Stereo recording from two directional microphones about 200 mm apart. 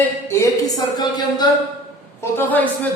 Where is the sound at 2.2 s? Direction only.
10° left (ahead or behind).